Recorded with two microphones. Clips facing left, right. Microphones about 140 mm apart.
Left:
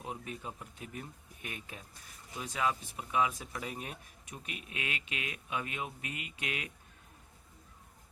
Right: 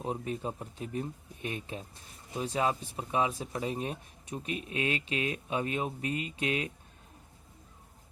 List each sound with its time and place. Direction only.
0.0 s speech: 35° right (ahead or behind)